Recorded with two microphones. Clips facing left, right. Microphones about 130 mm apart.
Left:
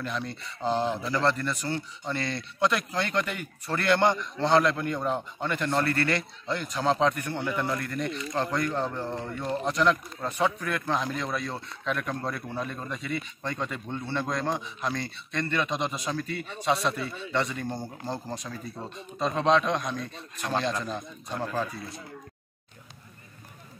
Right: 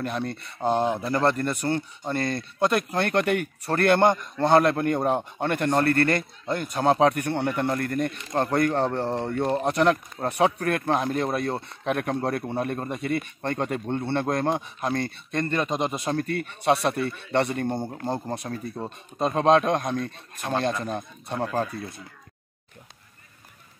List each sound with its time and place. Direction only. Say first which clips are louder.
0.0 s speech: right 4 dB; 55° right (ahead or behind)
12.5 s a man's voice: right 6 dB; 55° right (ahead or behind)